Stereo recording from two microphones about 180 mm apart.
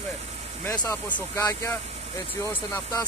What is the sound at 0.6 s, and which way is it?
Speech, 10° left (ahead or behind).